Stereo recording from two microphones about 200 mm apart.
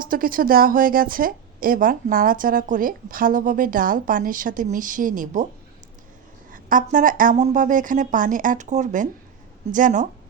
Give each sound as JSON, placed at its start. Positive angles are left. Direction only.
{"t": 0.0, "sound": "a woman's voice", "side_deg": -45}
{"t": 6.5, "sound": "a woman's voice", "side_deg": -40}